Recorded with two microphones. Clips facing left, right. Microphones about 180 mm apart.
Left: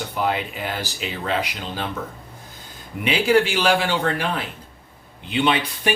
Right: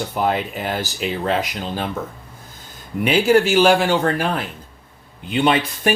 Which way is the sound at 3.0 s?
45° right (ahead or behind).